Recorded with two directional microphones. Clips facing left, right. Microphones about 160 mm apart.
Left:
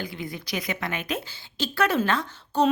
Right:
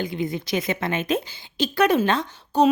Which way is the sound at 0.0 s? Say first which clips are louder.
Right 7 dB; 20° right (ahead or behind).